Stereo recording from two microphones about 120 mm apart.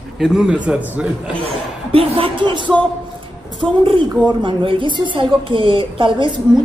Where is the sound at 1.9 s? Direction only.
50° right (ahead or behind).